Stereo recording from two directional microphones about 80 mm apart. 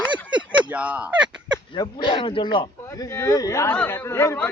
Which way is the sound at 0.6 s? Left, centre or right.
Centre.